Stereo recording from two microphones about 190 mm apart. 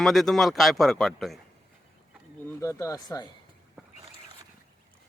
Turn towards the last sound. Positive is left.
turn(degrees=15)  # may be behind; listen again after turning